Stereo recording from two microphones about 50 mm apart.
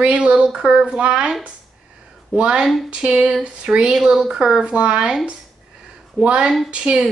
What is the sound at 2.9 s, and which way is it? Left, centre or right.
Speech, right.